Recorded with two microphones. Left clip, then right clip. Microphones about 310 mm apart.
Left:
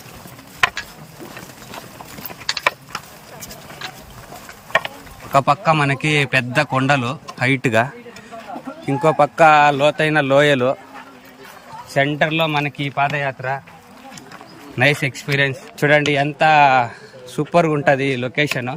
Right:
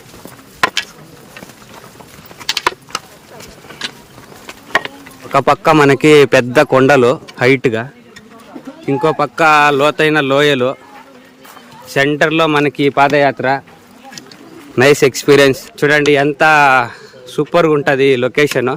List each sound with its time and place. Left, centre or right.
0.6 s a sound: right
2.5 s a sound: right
5.3 s a man's voice: centre
8.9 s speech: centre
11.9 s a man's voice: centre
14.8 s a man's voice: centre
15.8 s a man's voice: centre